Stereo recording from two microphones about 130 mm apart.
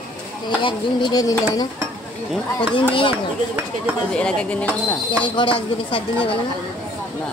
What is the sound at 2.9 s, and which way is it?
Dishes, 40° left (ahead or behind).